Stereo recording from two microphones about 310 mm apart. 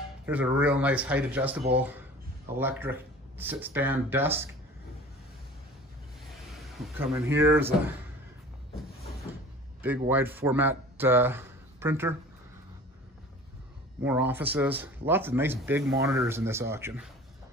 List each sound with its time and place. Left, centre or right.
0.3 s speech: centre
6.6 s speech: centre
9.8 s speech: centre
14.0 s speech: centre